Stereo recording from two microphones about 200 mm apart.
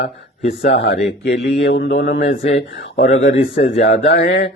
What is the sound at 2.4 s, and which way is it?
Speech, 30° left (ahead or behind).